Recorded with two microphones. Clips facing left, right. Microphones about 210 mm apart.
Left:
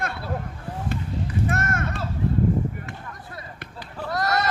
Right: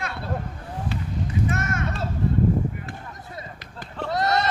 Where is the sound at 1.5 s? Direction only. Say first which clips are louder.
Left 1 dB; 55° left (ahead or behind).